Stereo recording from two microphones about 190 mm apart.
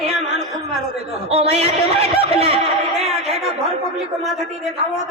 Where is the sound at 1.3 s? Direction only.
35° right (ahead or behind).